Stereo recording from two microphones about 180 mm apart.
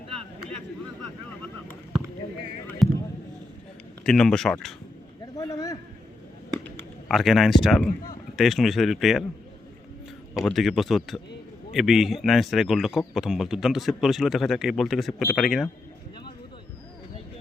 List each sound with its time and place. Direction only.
2.8 s basketball bounce: centre (ahead or behind)
4.0 s a man's voice: 5° left (ahead or behind)
5.2 s a sound: 20° left (ahead or behind)
7.1 s a man's voice: centre (ahead or behind)
10.3 s a man's voice: centre (ahead or behind)